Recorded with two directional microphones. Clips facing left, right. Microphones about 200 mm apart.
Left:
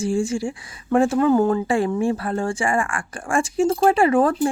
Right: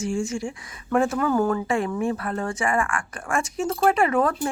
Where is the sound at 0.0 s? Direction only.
30° left (ahead or behind).